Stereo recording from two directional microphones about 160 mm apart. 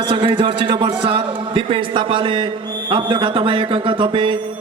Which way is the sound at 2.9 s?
30° right (ahead or behind).